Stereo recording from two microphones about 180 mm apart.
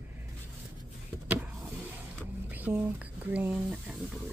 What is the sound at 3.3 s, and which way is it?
Speech, 5° right (ahead or behind).